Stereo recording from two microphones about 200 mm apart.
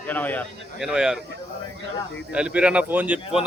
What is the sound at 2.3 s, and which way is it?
A man's voice, 5° right (ahead or behind).